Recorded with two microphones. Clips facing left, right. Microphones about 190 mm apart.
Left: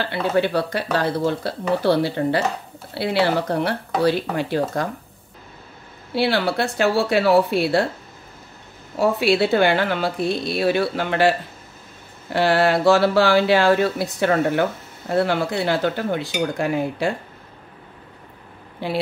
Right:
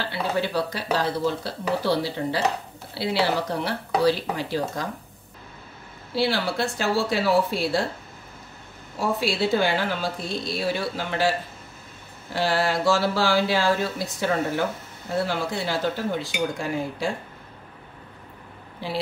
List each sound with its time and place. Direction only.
0.1 s speech: 60° left (ahead or behind)
6.1 s speech: 60° left (ahead or behind)
9.2 s speech: 65° left (ahead or behind)